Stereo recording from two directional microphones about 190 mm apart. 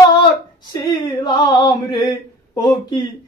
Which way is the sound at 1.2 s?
25° left (ahead or behind).